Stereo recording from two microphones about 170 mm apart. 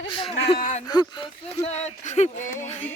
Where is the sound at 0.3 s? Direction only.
35° left (ahead or behind).